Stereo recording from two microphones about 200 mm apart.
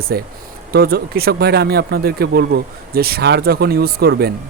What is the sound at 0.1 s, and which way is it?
Speech, 50° right (ahead or behind).